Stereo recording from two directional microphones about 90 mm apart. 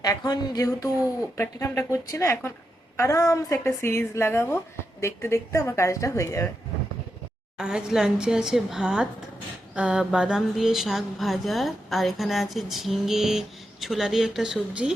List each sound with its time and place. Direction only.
0.0 s speech: 45° left (ahead or behind)
1.4 s a woman's voice: 30° left (ahead or behind)
7.6 s a woman's voice: 10° right (ahead or behind)